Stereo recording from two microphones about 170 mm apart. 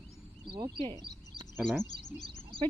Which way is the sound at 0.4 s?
25° right (ahead or behind).